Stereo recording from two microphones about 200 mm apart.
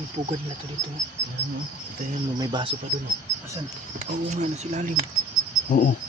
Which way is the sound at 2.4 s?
20° right (ahead or behind).